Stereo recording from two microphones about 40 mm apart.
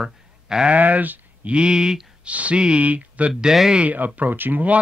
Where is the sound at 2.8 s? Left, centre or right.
Right.